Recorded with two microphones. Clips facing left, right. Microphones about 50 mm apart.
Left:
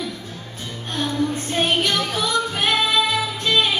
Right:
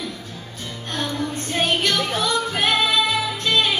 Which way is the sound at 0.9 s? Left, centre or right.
Centre.